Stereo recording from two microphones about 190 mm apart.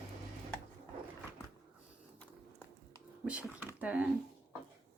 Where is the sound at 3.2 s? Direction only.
5° right (ahead or behind).